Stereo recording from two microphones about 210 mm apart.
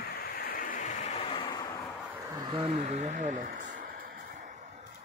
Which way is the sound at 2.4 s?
25° right (ahead or behind).